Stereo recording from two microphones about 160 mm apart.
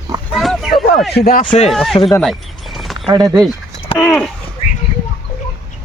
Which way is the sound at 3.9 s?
5° left (ahead or behind).